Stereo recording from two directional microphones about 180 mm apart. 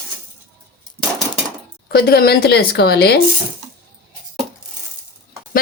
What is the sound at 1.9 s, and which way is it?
Speech, 60° left (ahead or behind).